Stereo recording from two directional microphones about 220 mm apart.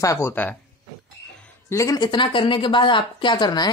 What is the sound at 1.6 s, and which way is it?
A woman's voice, 15° left (ahead or behind).